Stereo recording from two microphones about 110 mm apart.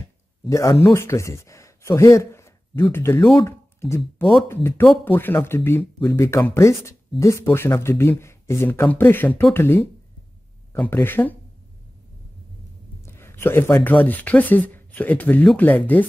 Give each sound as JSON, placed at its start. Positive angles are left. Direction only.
{"t": 0.8, "sound": "speech", "side_deg": 25}
{"t": 3.4, "sound": "a sound", "side_deg": 20}
{"t": 4.5, "sound": "speech", "side_deg": 20}
{"t": 13.0, "sound": "speech", "side_deg": 20}